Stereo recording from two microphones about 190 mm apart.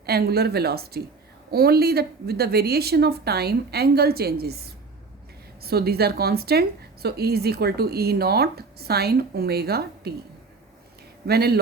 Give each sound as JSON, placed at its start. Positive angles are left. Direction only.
{"t": 0.0, "sound": "speech", "side_deg": -55}
{"t": 11.3, "sound": "speech", "side_deg": -55}